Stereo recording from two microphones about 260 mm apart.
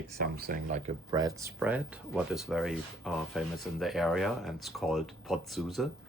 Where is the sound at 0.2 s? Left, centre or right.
Right.